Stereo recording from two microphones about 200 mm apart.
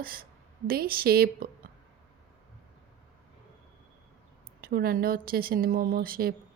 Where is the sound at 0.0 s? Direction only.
45° right (ahead or behind).